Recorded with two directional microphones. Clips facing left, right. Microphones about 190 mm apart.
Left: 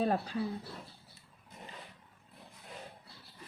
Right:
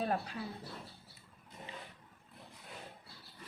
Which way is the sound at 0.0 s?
30° left (ahead or behind).